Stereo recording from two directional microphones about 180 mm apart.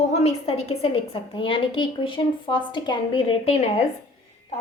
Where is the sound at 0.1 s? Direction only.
35° left (ahead or behind).